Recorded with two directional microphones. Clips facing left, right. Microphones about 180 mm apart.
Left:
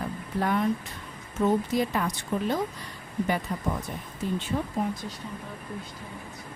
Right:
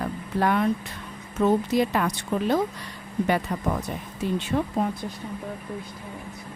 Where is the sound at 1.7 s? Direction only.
70° right (ahead or behind).